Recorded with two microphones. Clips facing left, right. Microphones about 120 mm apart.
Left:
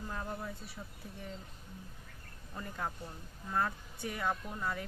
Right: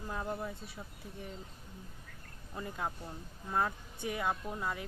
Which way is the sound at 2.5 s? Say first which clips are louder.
Right 1 dB; 15° right (ahead or behind).